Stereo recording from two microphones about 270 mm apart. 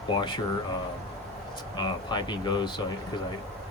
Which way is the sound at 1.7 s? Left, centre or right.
Centre.